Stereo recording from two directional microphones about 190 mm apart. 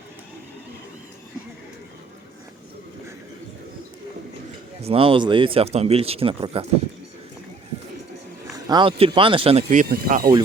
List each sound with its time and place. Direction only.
4.8 s speech: 30° right (ahead or behind)
8.5 s speech: 20° right (ahead or behind)
9.9 s speech: 50° right (ahead or behind)